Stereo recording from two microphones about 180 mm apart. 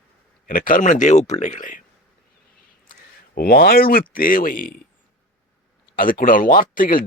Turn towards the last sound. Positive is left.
turn(degrees=50)  # may be behind; listen again after turning